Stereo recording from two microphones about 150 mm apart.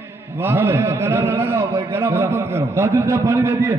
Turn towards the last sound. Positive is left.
turn(degrees=-15)  # may be behind; listen again after turning